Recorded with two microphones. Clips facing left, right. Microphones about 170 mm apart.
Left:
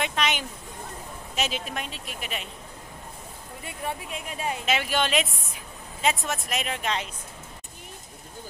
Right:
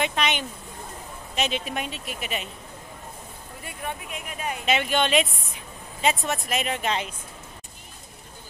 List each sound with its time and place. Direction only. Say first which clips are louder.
0.0 s a sound: right 2 dB; centre (ahead or behind)
1.3 s speech: right 3 dB; 5° left (ahead or behind)
3.6 s speech: left 1 dB; 30° left (ahead or behind)
4.6 s speech: right 4 dB; centre (ahead or behind)